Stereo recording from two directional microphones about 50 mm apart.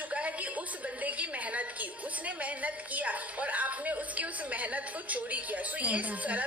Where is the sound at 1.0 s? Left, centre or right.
Right.